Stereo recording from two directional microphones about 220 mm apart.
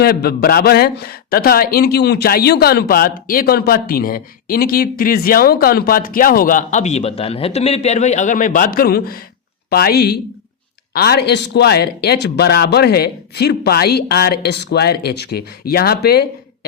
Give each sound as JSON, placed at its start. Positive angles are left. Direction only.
{"t": 0.0, "sound": "a man's voice", "side_deg": 45}